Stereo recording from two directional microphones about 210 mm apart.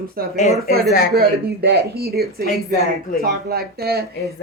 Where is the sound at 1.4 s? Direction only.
50° right (ahead or behind).